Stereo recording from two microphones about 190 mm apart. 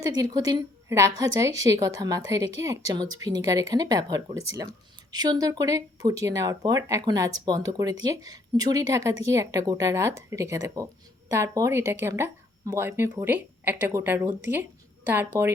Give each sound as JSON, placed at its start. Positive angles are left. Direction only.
{"t": 0.0, "sound": "speech", "side_deg": -20}